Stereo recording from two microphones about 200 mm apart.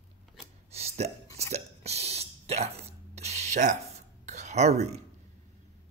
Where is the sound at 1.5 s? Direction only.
30° right (ahead or behind).